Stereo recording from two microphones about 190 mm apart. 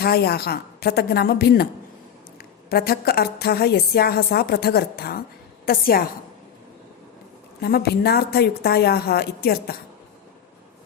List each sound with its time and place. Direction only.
0.0 s a woman's voice: 55° left (ahead or behind)
2.6 s a woman's voice: 55° left (ahead or behind)
7.6 s a woman's voice: 55° left (ahead or behind)